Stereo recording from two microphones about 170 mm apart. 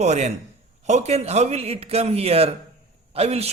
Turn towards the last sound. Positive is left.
turn(degrees=-35)  # may be behind; listen again after turning